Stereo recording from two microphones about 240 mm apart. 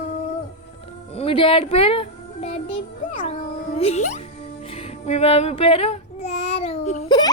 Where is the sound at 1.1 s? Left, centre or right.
Left.